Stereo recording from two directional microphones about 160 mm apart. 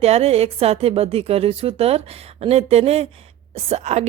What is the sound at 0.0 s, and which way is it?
Speech, 40° right (ahead or behind).